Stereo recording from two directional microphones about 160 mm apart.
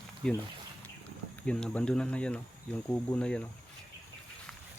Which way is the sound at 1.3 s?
5° left (ahead or behind).